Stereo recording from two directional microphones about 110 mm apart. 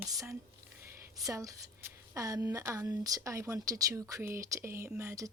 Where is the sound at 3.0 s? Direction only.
30° right (ahead or behind).